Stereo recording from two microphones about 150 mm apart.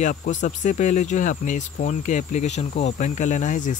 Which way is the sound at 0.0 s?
60° left (ahead or behind).